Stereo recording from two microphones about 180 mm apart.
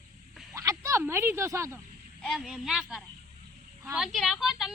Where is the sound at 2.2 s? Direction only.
Centre (ahead or behind).